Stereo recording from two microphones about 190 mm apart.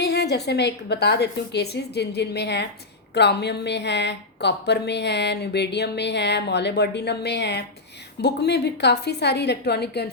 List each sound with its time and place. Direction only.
0.0 s speech: 60° left (ahead or behind)